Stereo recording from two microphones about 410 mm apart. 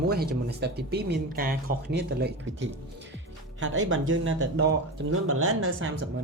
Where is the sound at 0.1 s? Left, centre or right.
Right.